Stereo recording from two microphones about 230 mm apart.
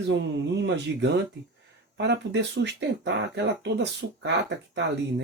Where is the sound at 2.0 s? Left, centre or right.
Right.